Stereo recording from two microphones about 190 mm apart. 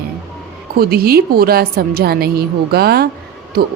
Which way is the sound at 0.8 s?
55° right (ahead or behind).